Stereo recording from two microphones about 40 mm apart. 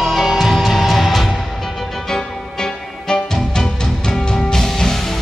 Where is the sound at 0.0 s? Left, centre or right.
Centre.